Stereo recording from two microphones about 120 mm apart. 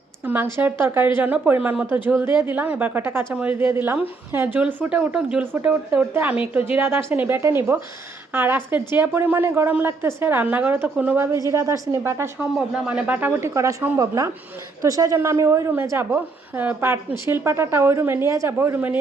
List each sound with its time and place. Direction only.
0.6 s a woman's voice: 15° right (ahead or behind)
2.0 s a woman's voice: 20° right (ahead or behind)
11.3 s a woman's voice: 25° right (ahead or behind)
12.4 s a woman's voice: 5° right (ahead or behind)
13.5 s a woman's voice: 25° right (ahead or behind)